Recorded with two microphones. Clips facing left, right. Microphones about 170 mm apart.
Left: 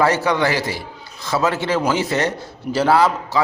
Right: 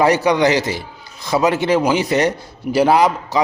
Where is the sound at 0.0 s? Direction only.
15° right (ahead or behind).